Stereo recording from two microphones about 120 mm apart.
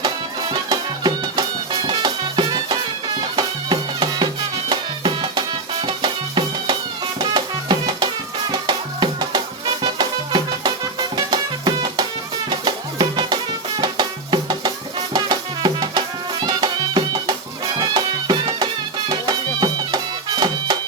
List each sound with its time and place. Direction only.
0.7 s music: 35° right (ahead or behind)